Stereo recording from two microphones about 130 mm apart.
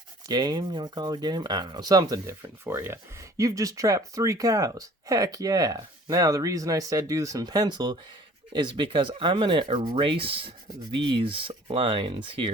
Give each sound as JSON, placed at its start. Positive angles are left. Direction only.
{"t": 0.3, "sound": "speech", "side_deg": -30}